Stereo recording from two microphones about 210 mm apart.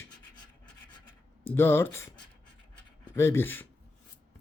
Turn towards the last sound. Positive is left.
turn(degrees=10)  # may be behind; listen again after turning